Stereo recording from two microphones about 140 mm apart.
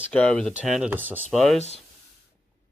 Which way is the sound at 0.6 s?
5° right (ahead or behind).